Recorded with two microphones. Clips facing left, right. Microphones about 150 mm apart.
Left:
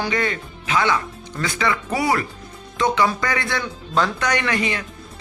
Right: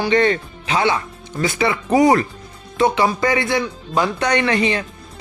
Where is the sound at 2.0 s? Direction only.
35° right (ahead or behind).